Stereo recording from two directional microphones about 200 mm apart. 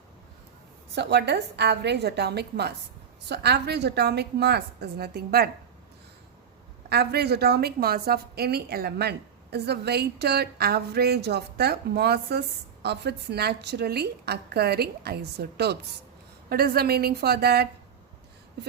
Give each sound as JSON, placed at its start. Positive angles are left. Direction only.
{"t": 0.9, "sound": "a woman's voice", "side_deg": -60}
{"t": 6.9, "sound": "a woman's voice", "side_deg": -55}